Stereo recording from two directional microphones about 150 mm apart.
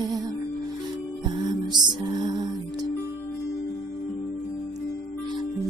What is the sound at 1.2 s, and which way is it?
Music, 30° right (ahead or behind).